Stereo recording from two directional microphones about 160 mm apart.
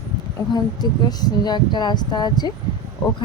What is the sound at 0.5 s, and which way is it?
A woman's voice, 25° left (ahead or behind).